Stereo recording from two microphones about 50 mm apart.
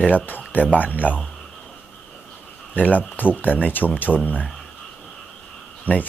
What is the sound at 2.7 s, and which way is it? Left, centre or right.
Speech, left.